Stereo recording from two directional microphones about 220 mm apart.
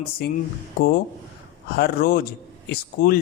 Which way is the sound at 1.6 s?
45° left (ahead or behind).